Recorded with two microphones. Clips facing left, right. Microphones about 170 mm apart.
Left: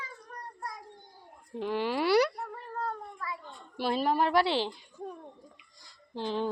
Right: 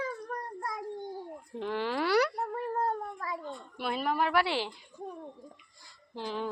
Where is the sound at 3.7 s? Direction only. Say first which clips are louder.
Left 3 dB; 30° left (ahead or behind).